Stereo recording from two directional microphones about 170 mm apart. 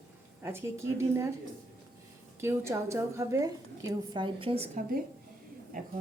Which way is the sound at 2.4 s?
15° right (ahead or behind).